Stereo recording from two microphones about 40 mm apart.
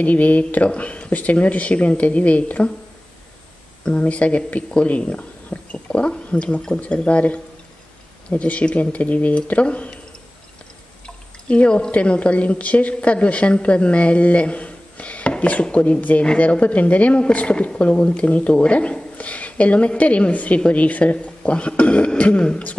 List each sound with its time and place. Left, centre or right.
0.0 s speech: left
3.8 s speech: left
8.4 s speech: left
11.4 s a woman's voice: left